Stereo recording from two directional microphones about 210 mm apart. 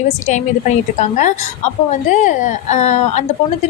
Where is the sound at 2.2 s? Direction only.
35° left (ahead or behind).